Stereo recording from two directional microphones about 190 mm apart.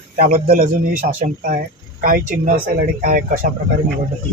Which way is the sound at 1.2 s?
45° right (ahead or behind).